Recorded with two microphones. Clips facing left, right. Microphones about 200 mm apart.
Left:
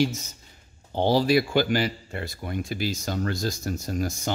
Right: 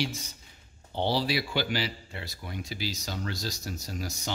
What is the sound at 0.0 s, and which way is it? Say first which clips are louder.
Speech: left 8 dB; 45° left (ahead or behind).